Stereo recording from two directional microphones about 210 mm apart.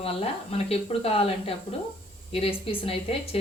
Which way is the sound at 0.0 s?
30° left (ahead or behind).